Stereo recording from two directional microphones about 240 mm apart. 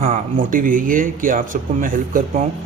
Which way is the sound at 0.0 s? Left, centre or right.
Right.